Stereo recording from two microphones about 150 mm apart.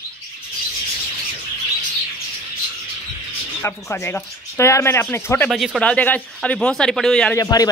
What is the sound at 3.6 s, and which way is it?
Speech, 15° left (ahead or behind).